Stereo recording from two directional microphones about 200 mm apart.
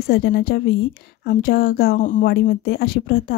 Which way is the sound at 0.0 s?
50° left (ahead or behind).